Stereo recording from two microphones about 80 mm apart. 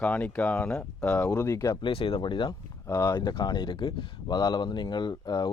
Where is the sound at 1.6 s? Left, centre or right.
Left.